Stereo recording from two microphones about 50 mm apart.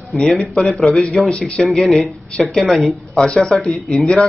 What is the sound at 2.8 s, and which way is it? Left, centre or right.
Speech, centre.